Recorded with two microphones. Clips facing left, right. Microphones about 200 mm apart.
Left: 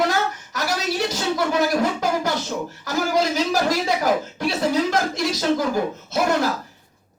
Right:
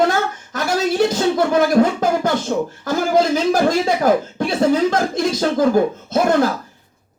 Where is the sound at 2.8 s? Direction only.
50° right (ahead or behind).